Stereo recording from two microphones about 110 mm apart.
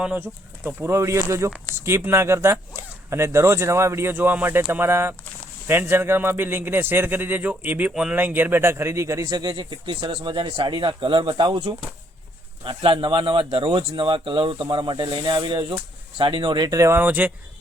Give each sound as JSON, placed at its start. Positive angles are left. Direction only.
{"t": 0.2, "sound": "speech", "side_deg": -20}
{"t": 10.1, "sound": "speech", "side_deg": -55}
{"t": 17.0, "sound": "speech", "side_deg": -15}